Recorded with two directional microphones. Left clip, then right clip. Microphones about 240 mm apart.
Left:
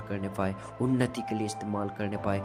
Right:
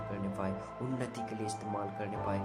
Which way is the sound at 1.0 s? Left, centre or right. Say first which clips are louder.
Left 7 dB; left.